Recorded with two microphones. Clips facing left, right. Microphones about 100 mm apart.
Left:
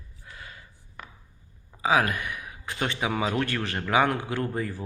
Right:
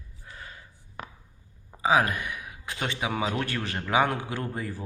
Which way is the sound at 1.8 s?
25° right (ahead or behind).